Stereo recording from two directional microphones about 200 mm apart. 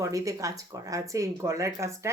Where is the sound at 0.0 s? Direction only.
15° right (ahead or behind).